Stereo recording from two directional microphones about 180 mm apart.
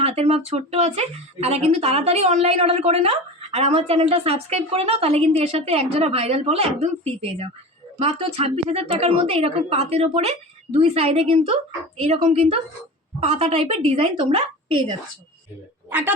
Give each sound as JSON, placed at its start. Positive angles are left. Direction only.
{"t": 0.0, "sound": "speech", "side_deg": -35}
{"t": 15.9, "sound": "speech", "side_deg": -10}